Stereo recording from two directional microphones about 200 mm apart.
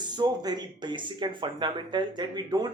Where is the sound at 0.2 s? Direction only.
20° right (ahead or behind).